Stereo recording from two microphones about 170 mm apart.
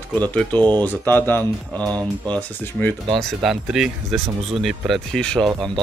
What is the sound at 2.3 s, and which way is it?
Speech, 10° left (ahead or behind).